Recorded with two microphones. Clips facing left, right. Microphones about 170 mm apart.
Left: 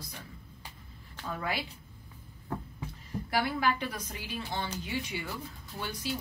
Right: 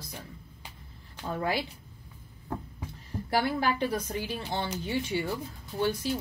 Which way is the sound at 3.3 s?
30° right (ahead or behind).